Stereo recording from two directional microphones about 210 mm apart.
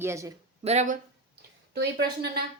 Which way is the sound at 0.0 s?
15° right (ahead or behind).